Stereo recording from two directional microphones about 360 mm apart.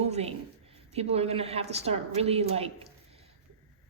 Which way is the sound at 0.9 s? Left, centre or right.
Centre.